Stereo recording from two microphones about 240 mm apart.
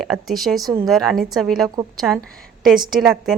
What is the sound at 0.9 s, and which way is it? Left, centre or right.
A woman's voice, centre.